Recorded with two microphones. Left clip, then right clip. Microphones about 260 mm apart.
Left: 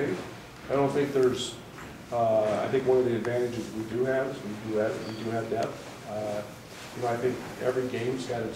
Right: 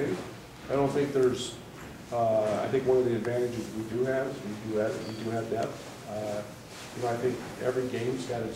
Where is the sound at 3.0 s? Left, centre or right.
Left.